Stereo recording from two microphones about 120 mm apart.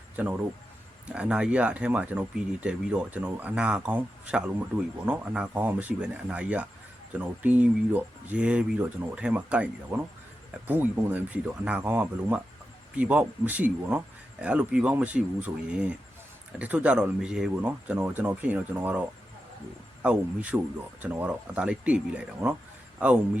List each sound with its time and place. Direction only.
0.2 s speech: 10° right (ahead or behind)
16.6 s speech: 10° right (ahead or behind)